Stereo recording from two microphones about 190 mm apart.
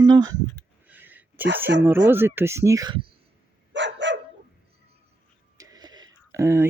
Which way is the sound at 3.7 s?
70° right (ahead or behind).